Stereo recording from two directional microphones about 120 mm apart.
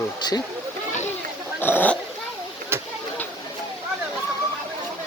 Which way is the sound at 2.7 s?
20° right (ahead or behind).